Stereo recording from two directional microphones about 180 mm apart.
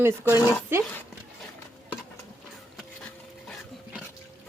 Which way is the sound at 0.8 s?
10° left (ahead or behind).